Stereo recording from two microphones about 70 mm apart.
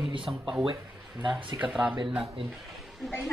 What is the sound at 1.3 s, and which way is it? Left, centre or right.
Speech, centre.